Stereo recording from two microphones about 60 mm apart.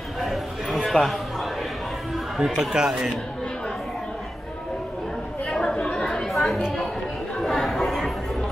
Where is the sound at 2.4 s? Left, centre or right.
Centre.